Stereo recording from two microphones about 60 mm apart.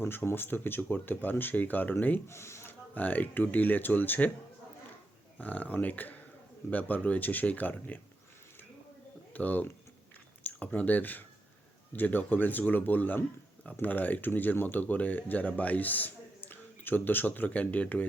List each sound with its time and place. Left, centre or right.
0.0 s speech: left
2.2 s speech: left
2.6 s speech: left
5.4 s speech: left
9.3 s speech: left